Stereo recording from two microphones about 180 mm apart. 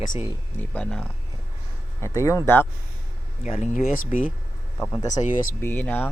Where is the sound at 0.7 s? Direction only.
5° left (ahead or behind).